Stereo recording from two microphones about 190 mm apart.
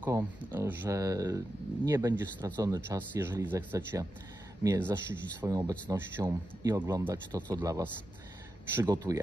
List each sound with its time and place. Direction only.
0.0 s speech: 10° right (ahead or behind)